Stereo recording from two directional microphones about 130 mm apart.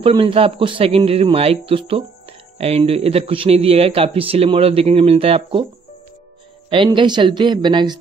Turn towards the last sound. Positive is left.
turn(degrees=-35)  # may be behind; listen again after turning